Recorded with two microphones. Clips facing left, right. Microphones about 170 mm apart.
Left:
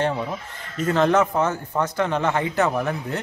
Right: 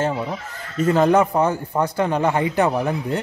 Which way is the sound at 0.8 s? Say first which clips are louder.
Right 3 dB; 10° right (ahead or behind).